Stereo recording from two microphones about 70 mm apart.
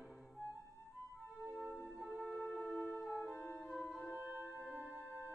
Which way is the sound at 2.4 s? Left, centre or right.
Centre.